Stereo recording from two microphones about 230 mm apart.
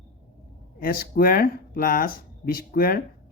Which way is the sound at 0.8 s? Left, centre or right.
Left.